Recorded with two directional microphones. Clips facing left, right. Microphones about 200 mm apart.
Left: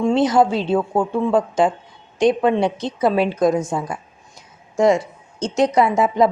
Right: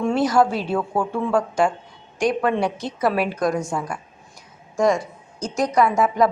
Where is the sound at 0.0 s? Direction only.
20° left (ahead or behind).